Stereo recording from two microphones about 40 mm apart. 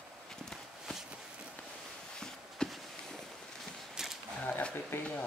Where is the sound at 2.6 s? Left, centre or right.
Left.